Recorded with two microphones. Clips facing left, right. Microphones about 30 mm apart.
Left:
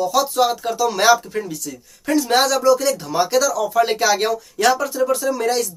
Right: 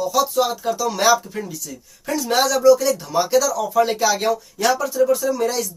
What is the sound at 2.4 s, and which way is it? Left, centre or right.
Speech, left.